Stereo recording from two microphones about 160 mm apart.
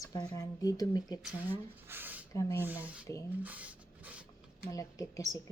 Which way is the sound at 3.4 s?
10° right (ahead or behind).